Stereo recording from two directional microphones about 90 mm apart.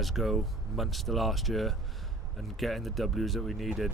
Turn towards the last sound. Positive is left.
turn(degrees=0)  # may be behind; listen again after turning